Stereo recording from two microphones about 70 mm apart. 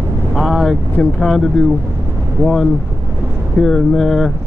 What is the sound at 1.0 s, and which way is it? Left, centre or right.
Speech, centre.